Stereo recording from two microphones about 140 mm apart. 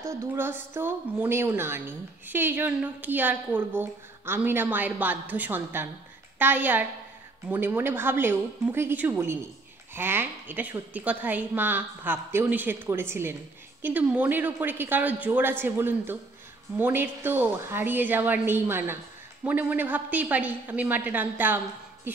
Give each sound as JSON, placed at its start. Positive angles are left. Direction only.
{"t": 0.0, "sound": "a woman's voice", "side_deg": -20}